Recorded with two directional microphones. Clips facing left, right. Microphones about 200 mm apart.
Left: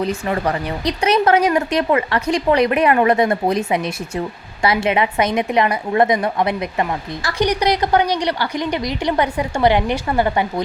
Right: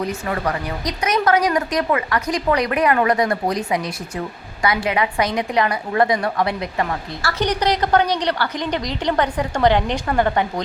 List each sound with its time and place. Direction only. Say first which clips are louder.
0.0 s a woman's voice: left 3 dB; 30° left (ahead or behind); by 10.4 s 10° left (ahead or behind)